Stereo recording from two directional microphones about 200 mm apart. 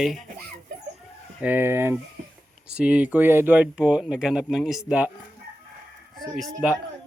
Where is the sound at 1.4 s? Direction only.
10° right (ahead or behind).